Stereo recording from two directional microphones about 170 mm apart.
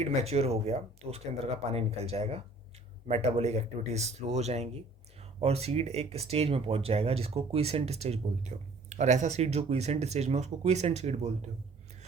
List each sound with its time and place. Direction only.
0.0 s speech: 40° right (ahead or behind)